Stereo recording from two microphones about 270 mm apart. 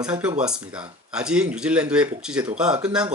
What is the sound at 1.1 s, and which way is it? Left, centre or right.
Speech, centre.